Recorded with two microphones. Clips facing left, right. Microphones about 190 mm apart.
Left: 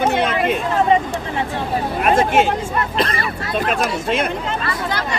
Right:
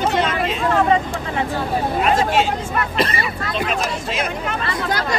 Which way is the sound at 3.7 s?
55° left (ahead or behind).